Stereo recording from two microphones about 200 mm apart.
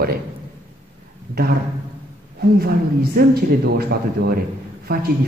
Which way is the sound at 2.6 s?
50° right (ahead or behind).